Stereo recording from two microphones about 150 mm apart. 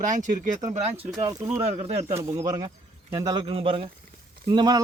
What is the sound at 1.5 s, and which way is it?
A man's voice, 20° right (ahead or behind).